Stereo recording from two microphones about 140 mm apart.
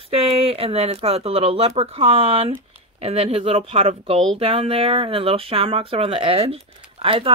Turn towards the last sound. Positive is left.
turn(degrees=-40)  # may be behind; listen again after turning